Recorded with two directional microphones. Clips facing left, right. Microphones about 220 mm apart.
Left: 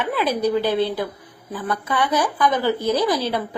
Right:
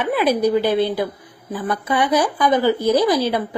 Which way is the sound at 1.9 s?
10° right (ahead or behind).